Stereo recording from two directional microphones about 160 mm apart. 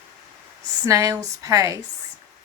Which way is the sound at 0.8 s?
20° right (ahead or behind).